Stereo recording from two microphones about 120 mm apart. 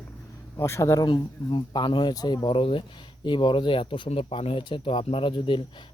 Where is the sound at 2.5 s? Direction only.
50° left (ahead or behind).